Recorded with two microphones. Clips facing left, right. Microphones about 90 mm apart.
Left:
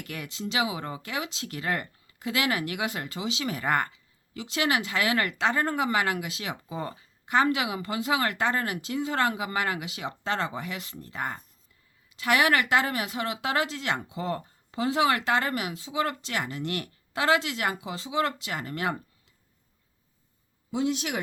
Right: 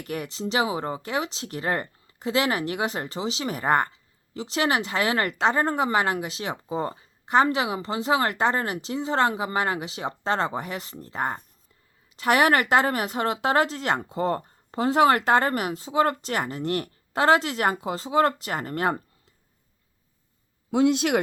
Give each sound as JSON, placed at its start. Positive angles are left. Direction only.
{"t": 0.0, "sound": "speech", "side_deg": -30}
{"t": 20.7, "sound": "speech", "side_deg": -80}